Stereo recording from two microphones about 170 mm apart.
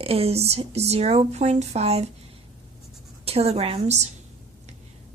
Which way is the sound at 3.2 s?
35° right (ahead or behind).